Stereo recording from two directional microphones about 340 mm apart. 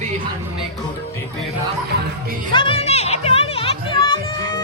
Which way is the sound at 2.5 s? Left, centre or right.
Centre.